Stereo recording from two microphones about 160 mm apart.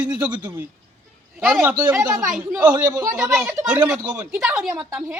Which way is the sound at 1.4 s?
10° right (ahead or behind).